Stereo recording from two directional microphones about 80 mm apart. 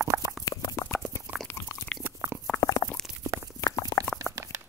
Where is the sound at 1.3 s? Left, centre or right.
Right.